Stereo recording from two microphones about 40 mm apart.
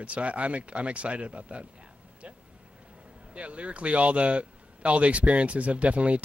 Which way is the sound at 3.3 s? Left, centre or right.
Right.